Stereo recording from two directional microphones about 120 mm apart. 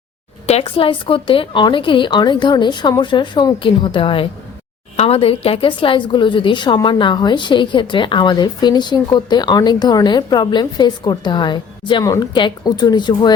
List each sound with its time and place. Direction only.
0.4 s a woman's voice: 55° left (ahead or behind); by 12.0 s 40° left (ahead or behind)
12.0 s a woman's voice: 30° left (ahead or behind)
12.3 s a woman's voice: 40° left (ahead or behind)